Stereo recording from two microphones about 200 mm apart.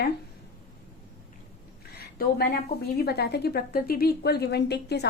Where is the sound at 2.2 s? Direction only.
50° left (ahead or behind).